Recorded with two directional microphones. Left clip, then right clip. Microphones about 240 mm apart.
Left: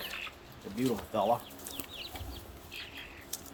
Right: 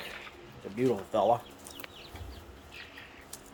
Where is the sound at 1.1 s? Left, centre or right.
Centre.